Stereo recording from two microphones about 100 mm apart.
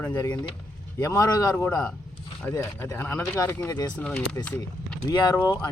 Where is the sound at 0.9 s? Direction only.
35° left (ahead or behind).